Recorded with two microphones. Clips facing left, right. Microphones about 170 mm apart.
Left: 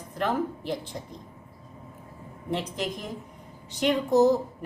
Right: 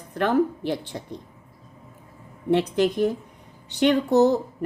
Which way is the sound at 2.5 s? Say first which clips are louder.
Right 10 dB; 65° right (ahead or behind).